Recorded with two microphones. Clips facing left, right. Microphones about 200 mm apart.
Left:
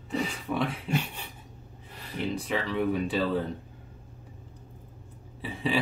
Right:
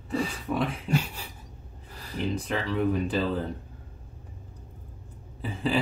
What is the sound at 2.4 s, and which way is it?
Speech, centre (ahead or behind).